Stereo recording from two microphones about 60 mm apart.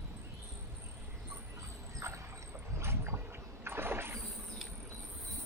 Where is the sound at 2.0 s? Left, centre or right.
Right.